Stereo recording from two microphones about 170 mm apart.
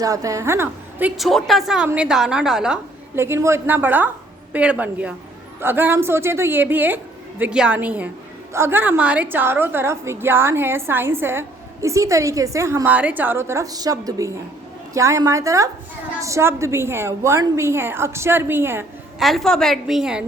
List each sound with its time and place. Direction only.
0.0 s a woman's voice: 20° right (ahead or behind); by 2.7 s 5° right (ahead or behind)
3.2 s a woman's voice: 15° right (ahead or behind)
19.2 s a woman's voice: centre (ahead or behind)